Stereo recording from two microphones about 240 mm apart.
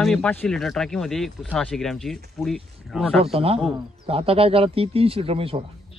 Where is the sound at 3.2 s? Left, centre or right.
Right.